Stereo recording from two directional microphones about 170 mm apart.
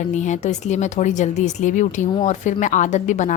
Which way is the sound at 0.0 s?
45° left (ahead or behind).